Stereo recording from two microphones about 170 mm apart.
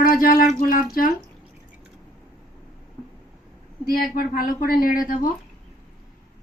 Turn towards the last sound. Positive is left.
turn(degrees=55)  # may be behind; listen again after turning